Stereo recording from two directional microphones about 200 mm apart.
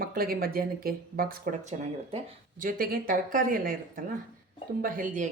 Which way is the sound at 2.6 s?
45° right (ahead or behind).